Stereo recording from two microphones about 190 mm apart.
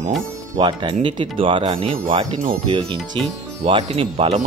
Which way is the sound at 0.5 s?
25° right (ahead or behind).